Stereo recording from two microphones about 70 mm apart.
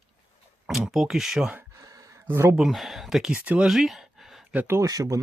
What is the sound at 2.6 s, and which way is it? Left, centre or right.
Speech, centre.